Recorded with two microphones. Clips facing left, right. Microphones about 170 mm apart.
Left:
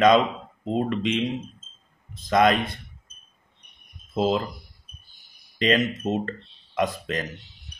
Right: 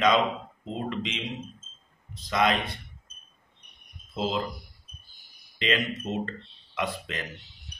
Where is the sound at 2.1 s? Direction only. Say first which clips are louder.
Left 6 dB; 50° left (ahead or behind).